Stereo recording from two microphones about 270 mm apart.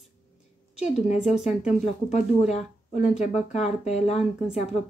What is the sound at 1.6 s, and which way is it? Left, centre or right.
Speech, left.